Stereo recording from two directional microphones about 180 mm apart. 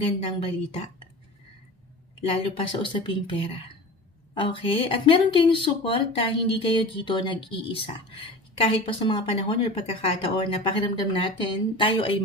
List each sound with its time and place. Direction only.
0.0 s a woman's voice: 30° left (ahead or behind)
2.2 s a woman's voice: 30° left (ahead or behind)